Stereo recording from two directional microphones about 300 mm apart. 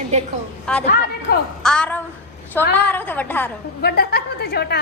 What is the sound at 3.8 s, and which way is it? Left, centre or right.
Speech, left.